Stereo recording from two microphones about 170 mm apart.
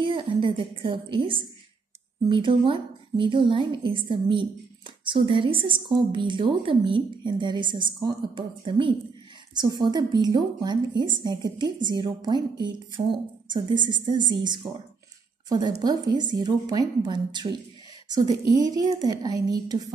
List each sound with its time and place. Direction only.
0.0 s a woman's voice: 30° right (ahead or behind)